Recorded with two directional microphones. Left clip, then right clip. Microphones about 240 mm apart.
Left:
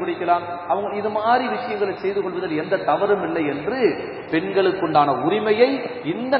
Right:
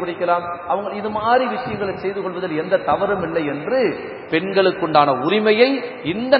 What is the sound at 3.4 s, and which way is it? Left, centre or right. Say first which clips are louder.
A man's voice: right 2 dB; right.